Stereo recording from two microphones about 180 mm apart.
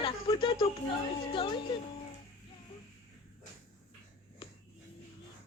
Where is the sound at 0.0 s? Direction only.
30° left (ahead or behind).